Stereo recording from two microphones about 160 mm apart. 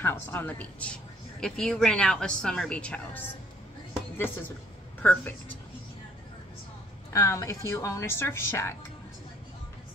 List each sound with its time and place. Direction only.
0.0 s a woman's voice: 15° left (ahead or behind)
5.0 s a woman's voice: 10° left (ahead or behind)
7.1 s a woman's voice: 20° left (ahead or behind)